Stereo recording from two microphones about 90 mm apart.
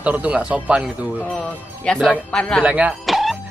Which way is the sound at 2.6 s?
15° right (ahead or behind).